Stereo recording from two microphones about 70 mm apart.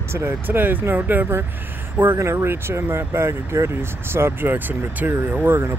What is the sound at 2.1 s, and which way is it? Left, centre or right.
Speech, right.